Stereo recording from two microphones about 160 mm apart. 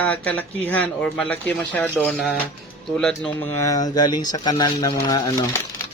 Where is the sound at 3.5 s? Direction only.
20° left (ahead or behind).